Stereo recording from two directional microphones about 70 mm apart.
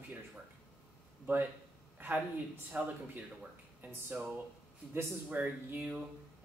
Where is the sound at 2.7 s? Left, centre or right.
Centre.